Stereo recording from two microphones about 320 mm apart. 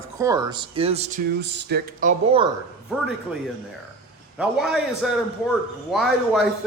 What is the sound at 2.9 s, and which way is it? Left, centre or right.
Speech, centre.